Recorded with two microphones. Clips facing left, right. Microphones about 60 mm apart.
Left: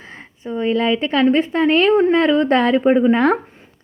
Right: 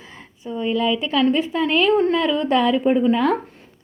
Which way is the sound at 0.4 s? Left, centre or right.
Left.